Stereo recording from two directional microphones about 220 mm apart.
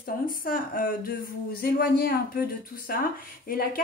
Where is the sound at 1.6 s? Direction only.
45° left (ahead or behind).